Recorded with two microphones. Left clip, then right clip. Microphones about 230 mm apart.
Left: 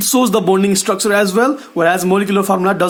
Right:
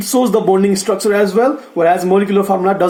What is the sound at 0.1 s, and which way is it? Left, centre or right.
Speech, left.